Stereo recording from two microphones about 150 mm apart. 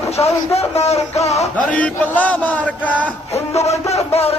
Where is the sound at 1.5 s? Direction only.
10° left (ahead or behind).